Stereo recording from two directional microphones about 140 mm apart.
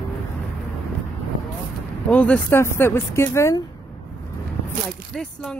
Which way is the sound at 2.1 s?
10° left (ahead or behind).